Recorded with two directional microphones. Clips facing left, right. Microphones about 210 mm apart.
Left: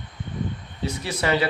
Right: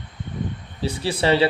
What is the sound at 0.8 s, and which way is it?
Speech, 30° right (ahead or behind).